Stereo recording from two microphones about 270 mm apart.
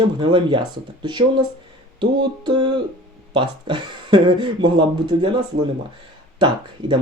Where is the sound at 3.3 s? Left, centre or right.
Centre.